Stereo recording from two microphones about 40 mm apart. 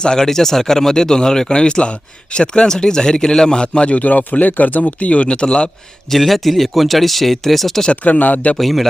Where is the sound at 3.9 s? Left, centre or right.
Left.